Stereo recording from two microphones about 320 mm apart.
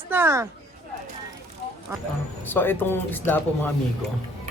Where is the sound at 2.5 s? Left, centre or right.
Centre.